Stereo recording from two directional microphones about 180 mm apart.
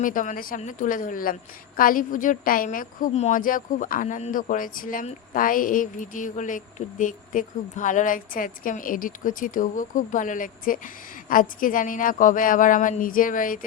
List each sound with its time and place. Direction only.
0.0 s a woman's voice: 45° left (ahead or behind)